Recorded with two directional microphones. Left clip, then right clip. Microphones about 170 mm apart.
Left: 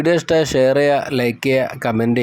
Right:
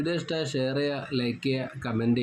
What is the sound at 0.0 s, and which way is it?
Speech, 45° left (ahead or behind).